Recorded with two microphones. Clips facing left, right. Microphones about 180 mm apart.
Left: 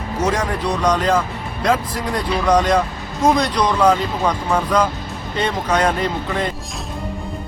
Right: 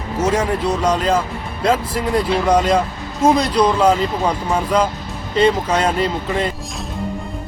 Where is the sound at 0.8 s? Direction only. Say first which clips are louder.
Even; 30° right (ahead or behind).